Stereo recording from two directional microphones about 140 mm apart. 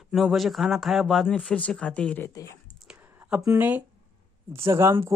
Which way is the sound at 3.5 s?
10° right (ahead or behind).